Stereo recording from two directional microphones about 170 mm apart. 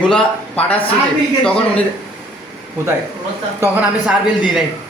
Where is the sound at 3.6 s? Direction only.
10° right (ahead or behind).